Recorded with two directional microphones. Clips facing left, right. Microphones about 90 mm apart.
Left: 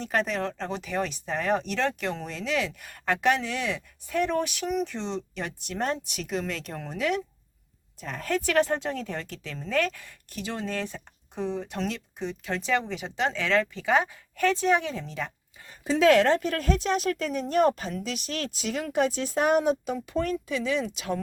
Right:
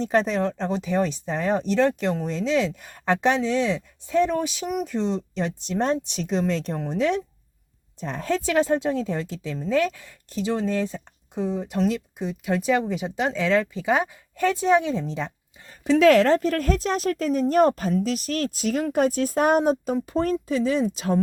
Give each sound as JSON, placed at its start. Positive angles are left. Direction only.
{"t": 0.0, "sound": "a woman's voice", "side_deg": -25}
{"t": 15.8, "sound": "a woman's voice", "side_deg": -70}
{"t": 16.0, "sound": "speech", "side_deg": -40}